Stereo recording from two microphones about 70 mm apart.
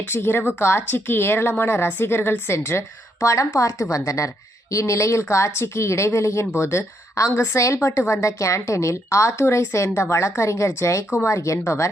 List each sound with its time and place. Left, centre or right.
0.1 s a woman's voice: left